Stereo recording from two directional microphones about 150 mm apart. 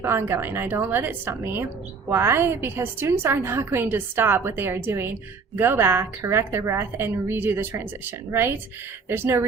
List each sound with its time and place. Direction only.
0.0 s a woman's voice: 15° right (ahead or behind)